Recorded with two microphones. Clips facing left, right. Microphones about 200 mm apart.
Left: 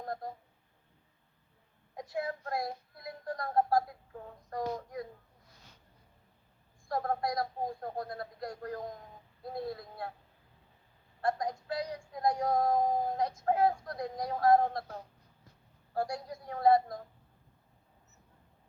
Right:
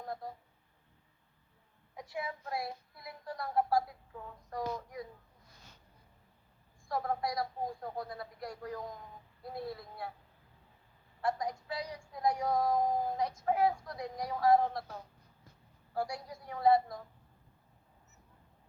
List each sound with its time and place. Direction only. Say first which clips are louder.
0.0 s telephone dialing: left 3 dB; 45° left (ahead or behind)
2.0 s child singing: left 4 dB; 50° left (ahead or behind)
4.4 s speech: left 2 dB; 50° left (ahead or behind)
6.8 s speech: left 2 dB; 50° left (ahead or behind)
11.2 s speech: left 2 dB; 50° left (ahead or behind)
16.0 s speech: left 2 dB; 50° left (ahead or behind)